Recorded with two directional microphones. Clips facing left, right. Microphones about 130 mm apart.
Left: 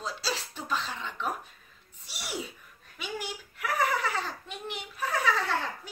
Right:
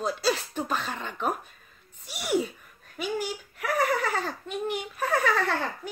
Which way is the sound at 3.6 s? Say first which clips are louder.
Right 3 dB; 45° right (ahead or behind).